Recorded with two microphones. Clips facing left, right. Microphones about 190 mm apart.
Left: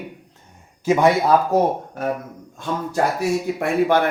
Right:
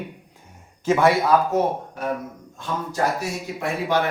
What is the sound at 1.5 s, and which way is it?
Speech, 35° left (ahead or behind).